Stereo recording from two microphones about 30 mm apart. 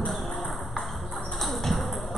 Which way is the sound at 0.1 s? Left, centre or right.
Centre.